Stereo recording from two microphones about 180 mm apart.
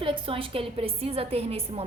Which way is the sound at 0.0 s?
30° right (ahead or behind).